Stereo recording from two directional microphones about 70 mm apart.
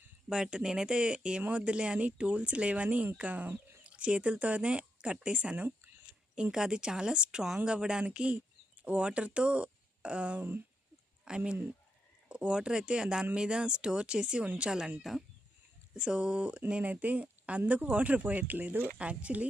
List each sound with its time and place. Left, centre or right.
0.3 s speech: centre
16.0 s speech: centre